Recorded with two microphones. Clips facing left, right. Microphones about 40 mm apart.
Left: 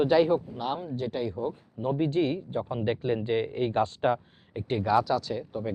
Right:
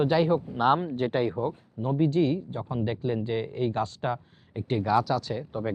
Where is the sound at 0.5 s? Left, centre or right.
Right.